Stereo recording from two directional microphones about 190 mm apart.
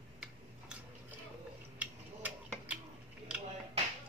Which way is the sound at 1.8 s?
5° right (ahead or behind).